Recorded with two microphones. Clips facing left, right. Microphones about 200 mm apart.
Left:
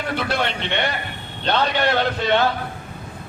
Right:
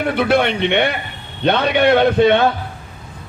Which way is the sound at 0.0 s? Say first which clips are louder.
Right 8 dB; 60° right (ahead or behind).